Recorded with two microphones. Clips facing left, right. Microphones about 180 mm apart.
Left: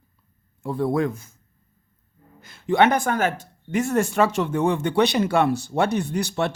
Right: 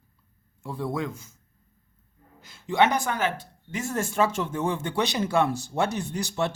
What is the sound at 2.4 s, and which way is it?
Speech, 55° left (ahead or behind).